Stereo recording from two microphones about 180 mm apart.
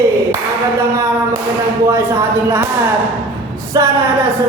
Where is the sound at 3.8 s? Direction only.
20° right (ahead or behind).